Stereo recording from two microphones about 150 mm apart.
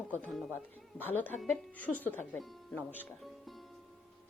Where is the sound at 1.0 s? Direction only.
10° left (ahead or behind).